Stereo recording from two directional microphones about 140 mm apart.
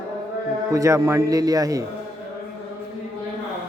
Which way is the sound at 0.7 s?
20° right (ahead or behind).